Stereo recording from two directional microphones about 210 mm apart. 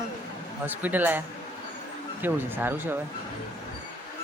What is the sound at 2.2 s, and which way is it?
Speech, 10° right (ahead or behind).